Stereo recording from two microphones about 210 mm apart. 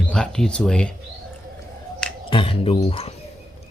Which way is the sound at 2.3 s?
25° left (ahead or behind).